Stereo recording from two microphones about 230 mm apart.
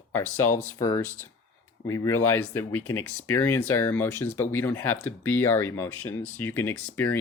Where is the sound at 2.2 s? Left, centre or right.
Left.